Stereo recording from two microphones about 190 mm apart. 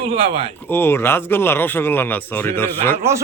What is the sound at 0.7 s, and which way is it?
Speech, 10° left (ahead or behind).